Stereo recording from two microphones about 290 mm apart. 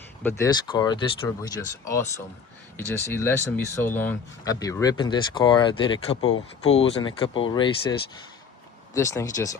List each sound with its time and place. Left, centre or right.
0.2 s speech: centre
6.2 s speech: left
6.7 s speech: centre
9.0 s speech: centre